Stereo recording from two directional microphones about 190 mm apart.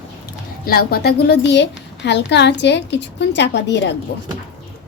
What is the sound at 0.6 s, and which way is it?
A woman's voice, 50° left (ahead or behind).